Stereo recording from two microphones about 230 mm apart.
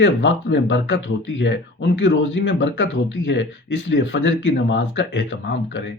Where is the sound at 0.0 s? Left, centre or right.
Left.